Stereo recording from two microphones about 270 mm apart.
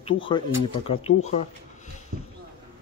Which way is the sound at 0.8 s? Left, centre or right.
Left.